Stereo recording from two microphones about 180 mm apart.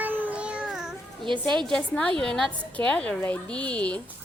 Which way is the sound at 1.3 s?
25° right (ahead or behind).